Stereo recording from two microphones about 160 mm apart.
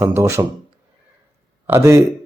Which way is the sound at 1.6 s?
15° right (ahead or behind).